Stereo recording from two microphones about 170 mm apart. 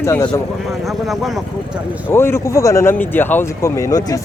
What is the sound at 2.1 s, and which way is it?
Speech, 15° left (ahead or behind).